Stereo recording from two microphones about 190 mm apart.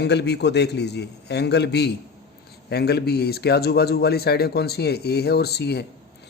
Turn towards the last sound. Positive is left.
turn(degrees=60)  # may be behind; listen again after turning